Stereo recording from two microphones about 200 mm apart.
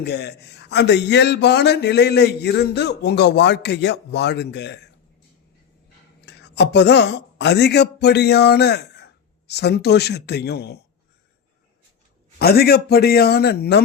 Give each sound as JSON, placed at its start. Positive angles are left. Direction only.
{"t": 0.0, "sound": "speech", "side_deg": 55}
{"t": 6.2, "sound": "speech", "side_deg": 60}
{"t": 12.4, "sound": "a man's voice", "side_deg": 50}